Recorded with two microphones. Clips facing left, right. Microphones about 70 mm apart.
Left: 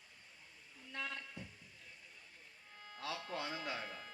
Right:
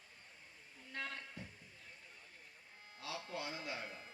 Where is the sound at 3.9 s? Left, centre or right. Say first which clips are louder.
Left 3 dB; left.